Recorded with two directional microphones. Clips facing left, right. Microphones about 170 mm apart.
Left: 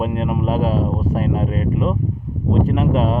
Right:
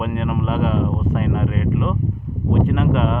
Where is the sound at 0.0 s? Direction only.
35° left (ahead or behind).